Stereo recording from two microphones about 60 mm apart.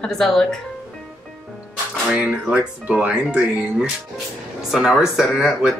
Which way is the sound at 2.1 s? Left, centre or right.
Centre.